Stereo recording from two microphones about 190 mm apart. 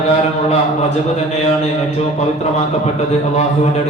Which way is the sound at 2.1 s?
35° left (ahead or behind).